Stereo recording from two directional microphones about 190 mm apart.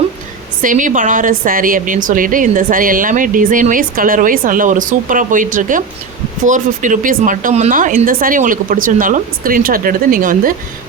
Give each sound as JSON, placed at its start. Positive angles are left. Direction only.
{"t": 0.6, "sound": "a woman's voice", "side_deg": -45}